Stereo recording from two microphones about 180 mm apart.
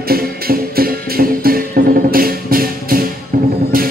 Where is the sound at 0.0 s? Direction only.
55° right (ahead or behind).